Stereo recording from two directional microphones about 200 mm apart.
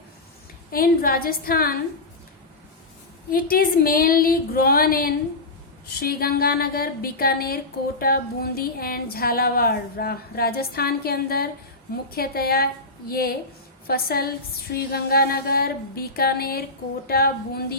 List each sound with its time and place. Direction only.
0.7 s a woman's voice: 45° left (ahead or behind)
3.5 s a woman's voice: 45° left (ahead or behind)